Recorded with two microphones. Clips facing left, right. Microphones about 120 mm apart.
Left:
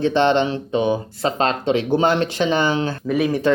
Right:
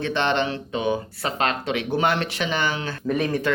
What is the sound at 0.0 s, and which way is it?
Speech, 30° left (ahead or behind).